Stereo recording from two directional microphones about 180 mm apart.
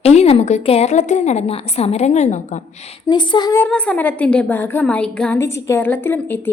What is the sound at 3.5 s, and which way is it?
A woman's voice, 5° left (ahead or behind).